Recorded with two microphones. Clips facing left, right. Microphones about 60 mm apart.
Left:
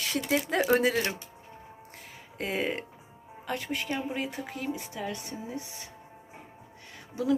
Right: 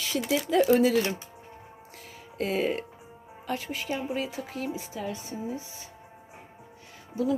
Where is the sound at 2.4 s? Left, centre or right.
Left.